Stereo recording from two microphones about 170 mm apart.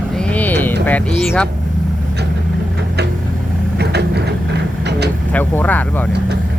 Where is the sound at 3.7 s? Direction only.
75° right (ahead or behind).